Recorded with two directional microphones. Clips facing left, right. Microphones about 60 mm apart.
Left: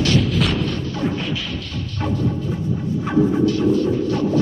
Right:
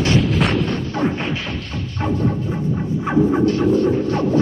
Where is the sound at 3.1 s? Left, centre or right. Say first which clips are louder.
Right 1 dB; right.